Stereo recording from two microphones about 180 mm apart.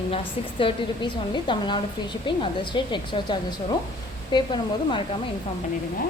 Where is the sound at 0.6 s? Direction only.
25° left (ahead or behind).